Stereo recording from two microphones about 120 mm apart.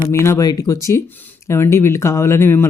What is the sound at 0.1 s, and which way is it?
Speech, 25° left (ahead or behind).